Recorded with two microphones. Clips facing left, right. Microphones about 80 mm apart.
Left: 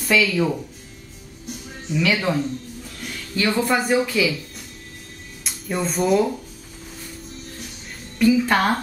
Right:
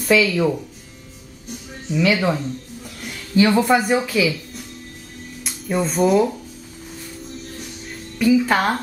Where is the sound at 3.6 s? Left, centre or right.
Centre.